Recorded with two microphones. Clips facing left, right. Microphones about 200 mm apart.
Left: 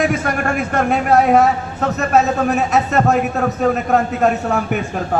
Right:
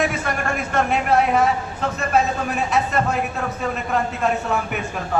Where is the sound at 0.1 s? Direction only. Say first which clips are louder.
Left 5 dB; 45° left (ahead or behind).